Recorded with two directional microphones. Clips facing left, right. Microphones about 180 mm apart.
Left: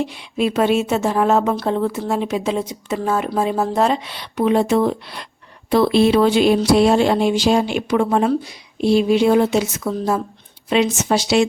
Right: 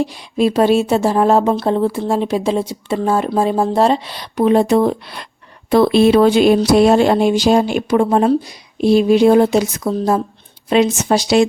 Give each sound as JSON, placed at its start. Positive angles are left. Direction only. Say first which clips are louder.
{"t": 0.0, "sound": "a woman's voice", "louder": "right 4 dB", "side_deg": -35}